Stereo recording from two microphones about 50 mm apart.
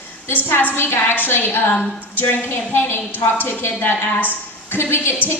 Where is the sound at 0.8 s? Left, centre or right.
Left.